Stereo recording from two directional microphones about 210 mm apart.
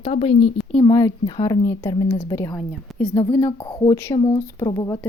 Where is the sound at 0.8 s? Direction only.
15° left (ahead or behind).